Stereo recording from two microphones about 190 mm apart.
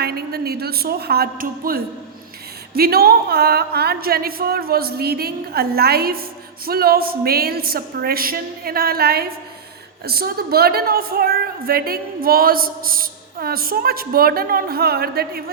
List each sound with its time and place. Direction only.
0.0 s a woman's voice: 55° right (ahead or behind)